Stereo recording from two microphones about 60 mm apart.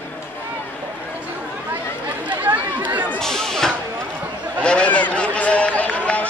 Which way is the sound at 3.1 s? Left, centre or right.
Centre.